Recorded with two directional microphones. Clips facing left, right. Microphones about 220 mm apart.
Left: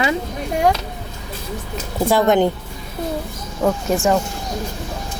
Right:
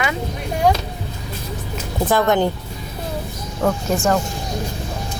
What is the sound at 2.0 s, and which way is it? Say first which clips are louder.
Speech: left 2 dB; 15° left (ahead or behind).